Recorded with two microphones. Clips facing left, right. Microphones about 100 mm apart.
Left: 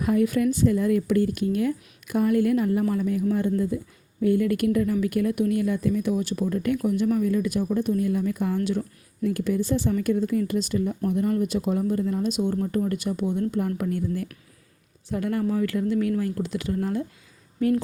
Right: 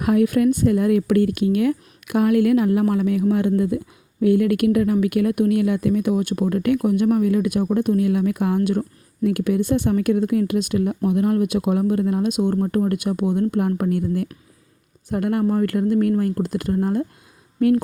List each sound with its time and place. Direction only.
0.0 s speech: 65° right (ahead or behind)
9.2 s speech: 65° right (ahead or behind)